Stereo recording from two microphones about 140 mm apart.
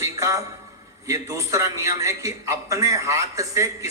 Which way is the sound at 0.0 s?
25° right (ahead or behind).